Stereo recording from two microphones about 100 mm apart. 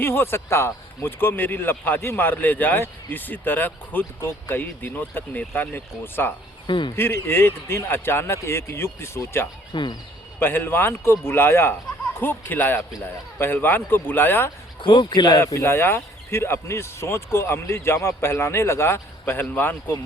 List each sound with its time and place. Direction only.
0.0 s speech: 20° left (ahead or behind)
6.7 s speech: 55° left (ahead or behind)
6.9 s speech: 20° left (ahead or behind)
9.7 s speech: 50° left (ahead or behind)
10.4 s speech: 20° left (ahead or behind)
14.8 s speech: 55° left (ahead or behind)
15.4 s speech: 25° left (ahead or behind)